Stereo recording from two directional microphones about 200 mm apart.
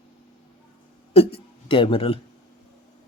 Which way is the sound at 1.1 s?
30° left (ahead or behind).